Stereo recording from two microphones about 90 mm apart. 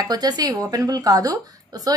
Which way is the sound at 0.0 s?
45° right (ahead or behind).